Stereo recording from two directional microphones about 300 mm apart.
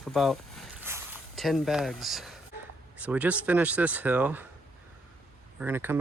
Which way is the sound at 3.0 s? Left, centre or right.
Centre.